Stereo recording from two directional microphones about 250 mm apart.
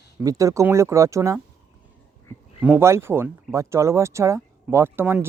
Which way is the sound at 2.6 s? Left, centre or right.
Centre.